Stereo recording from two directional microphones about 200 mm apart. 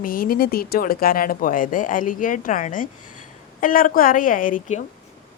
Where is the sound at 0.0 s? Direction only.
45° left (ahead or behind).